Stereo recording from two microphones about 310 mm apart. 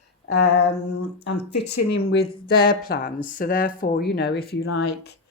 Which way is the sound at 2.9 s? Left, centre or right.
Left.